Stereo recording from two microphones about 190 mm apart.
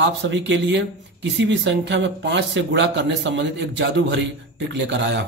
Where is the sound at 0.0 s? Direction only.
65° right (ahead or behind).